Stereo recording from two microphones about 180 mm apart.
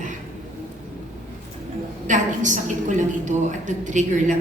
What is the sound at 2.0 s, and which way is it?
A woman's voice, 45° right (ahead or behind).